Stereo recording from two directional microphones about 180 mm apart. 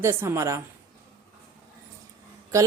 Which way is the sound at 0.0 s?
15° right (ahead or behind).